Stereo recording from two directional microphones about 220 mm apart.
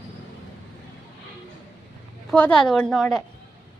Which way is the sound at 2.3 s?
5° left (ahead or behind).